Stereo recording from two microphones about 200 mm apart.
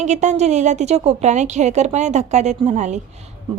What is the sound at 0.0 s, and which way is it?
A woman's voice, 35° right (ahead or behind).